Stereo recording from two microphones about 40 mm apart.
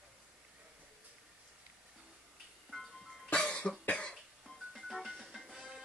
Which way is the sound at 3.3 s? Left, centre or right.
Left.